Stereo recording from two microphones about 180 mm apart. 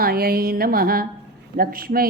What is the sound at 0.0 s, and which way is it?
Speech, 55° right (ahead or behind).